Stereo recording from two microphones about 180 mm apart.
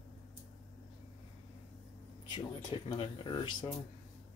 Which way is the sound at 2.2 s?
25° left (ahead or behind).